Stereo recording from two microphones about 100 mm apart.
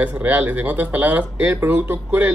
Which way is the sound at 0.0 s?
15° right (ahead or behind).